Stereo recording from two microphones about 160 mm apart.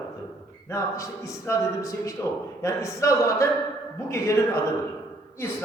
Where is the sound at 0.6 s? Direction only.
20° left (ahead or behind).